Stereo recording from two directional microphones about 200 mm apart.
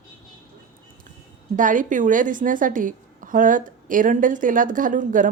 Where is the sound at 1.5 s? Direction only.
40° right (ahead or behind).